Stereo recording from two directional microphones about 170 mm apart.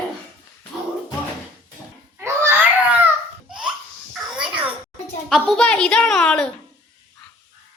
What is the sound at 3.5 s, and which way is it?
Baby laughter, 5° right (ahead or behind).